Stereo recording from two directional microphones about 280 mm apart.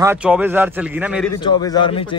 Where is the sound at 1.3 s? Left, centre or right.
Centre.